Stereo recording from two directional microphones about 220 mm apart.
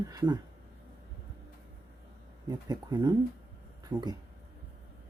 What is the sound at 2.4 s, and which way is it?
Speech, 20° right (ahead or behind).